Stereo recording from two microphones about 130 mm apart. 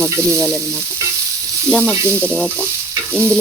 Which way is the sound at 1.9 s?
20° right (ahead or behind).